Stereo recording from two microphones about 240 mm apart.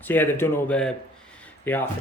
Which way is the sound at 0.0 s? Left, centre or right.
Centre.